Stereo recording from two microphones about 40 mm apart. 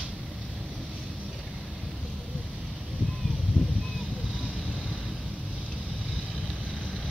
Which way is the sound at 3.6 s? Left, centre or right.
Right.